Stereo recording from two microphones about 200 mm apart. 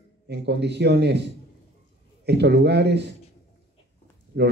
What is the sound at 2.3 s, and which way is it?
Speech, 60° right (ahead or behind).